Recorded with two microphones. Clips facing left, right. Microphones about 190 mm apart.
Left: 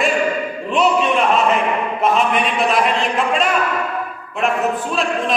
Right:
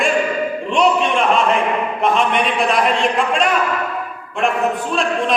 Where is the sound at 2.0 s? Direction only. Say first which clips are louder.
Even; centre (ahead or behind).